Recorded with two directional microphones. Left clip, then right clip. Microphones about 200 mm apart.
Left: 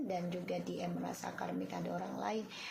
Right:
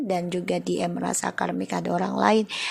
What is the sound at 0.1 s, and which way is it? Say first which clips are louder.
Speech: right 16 dB; 50° right (ahead or behind).